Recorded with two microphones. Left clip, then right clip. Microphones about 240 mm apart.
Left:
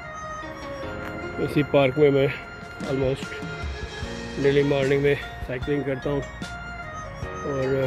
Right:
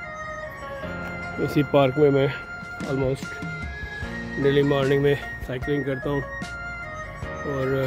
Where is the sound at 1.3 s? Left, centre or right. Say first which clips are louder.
Right 1 dB; centre.